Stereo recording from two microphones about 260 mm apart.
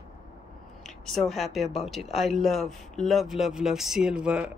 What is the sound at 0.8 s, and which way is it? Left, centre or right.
Speech, centre.